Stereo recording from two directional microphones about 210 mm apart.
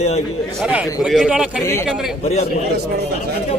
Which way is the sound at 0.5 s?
5° right (ahead or behind).